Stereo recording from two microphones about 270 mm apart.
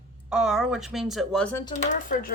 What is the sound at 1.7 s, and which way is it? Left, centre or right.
Speech, left.